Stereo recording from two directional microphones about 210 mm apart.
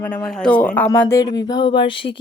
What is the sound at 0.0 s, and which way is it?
Speech, 5° left (ahead or behind).